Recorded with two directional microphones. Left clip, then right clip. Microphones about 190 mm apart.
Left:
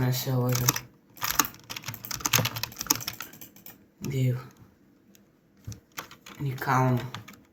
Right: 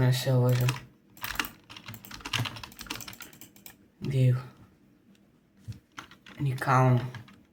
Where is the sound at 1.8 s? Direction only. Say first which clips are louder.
Left 8 dB; 35° left (ahead or behind).